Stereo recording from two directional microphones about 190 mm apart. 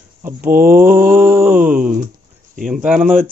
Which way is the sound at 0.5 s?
50° right (ahead or behind).